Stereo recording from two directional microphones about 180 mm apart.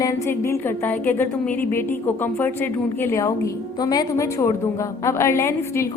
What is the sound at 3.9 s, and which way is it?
A woman's voice, 20° left (ahead or behind).